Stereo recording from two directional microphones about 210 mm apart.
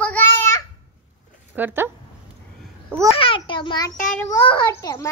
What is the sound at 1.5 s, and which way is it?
Speech, 10° right (ahead or behind).